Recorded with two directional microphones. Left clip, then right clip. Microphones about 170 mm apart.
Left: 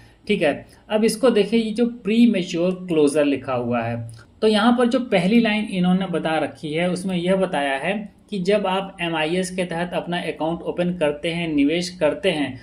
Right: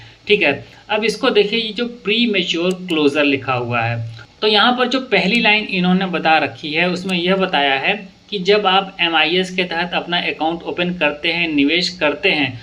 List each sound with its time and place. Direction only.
0.4 s speech: 40° left (ahead or behind)